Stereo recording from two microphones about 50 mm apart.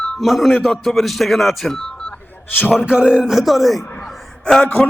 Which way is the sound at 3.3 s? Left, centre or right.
Centre.